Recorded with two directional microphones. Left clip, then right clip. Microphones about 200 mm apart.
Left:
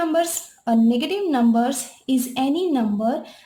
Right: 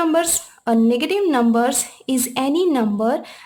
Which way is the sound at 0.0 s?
30° right (ahead or behind).